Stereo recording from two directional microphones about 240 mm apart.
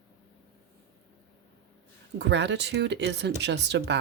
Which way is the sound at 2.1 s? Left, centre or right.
Right.